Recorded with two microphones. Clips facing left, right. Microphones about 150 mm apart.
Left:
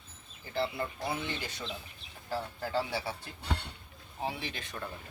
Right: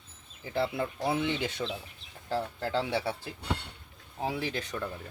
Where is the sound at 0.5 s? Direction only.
65° right (ahead or behind).